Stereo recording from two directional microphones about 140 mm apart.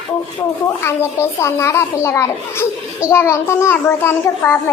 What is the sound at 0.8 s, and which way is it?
A child's voice, 15° left (ahead or behind).